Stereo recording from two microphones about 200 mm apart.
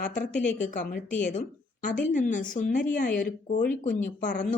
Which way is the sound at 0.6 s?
40° left (ahead or behind).